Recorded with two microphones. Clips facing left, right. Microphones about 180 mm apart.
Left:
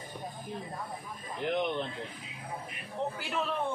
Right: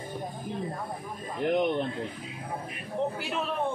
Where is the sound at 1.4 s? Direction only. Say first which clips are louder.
Right 5 dB; 50° right (ahead or behind).